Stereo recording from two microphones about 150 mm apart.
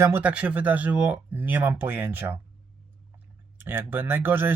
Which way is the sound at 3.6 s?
15° right (ahead or behind).